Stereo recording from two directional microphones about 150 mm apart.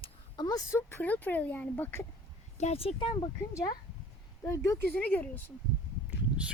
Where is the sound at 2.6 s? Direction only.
45° left (ahead or behind).